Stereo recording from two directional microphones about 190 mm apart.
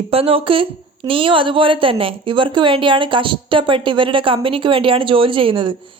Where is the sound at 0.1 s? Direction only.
30° right (ahead or behind).